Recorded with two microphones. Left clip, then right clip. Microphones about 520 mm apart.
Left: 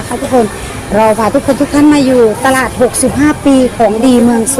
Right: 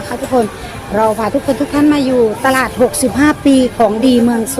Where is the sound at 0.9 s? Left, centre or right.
Right.